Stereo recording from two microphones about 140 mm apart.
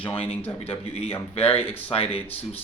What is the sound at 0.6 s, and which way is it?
Speech, 45° left (ahead or behind).